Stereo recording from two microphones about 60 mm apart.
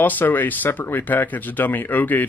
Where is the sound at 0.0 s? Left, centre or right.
Left.